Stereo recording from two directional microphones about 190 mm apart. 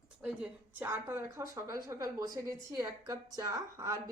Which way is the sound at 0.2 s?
5° right (ahead or behind).